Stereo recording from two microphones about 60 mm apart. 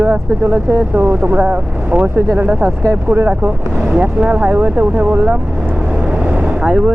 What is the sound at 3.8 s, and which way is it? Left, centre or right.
Speech, right.